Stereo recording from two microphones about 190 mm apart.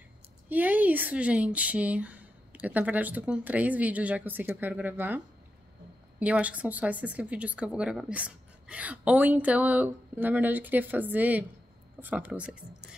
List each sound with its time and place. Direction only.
0.5 s a woman's voice: 10° right (ahead or behind)